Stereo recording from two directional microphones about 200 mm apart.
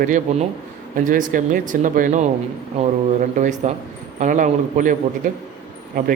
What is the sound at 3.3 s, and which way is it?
A man's voice, 35° right (ahead or behind).